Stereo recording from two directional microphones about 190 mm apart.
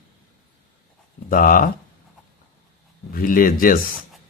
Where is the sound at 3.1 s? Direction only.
45° left (ahead or behind).